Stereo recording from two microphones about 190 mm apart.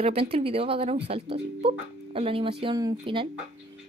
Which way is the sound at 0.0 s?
30° right (ahead or behind).